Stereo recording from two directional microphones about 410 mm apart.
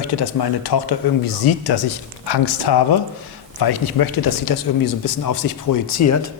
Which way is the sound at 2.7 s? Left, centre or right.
Left.